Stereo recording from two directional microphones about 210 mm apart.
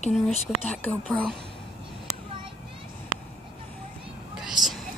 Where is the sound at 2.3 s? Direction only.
25° right (ahead or behind).